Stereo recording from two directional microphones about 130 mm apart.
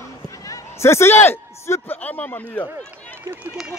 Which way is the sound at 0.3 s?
25° left (ahead or behind).